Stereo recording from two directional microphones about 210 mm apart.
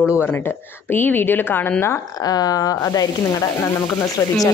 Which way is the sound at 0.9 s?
10° left (ahead or behind).